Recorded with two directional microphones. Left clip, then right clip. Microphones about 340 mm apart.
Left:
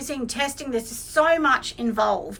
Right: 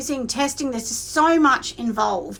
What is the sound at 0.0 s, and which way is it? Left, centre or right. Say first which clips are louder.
A woman's voice: right 3 dB; centre.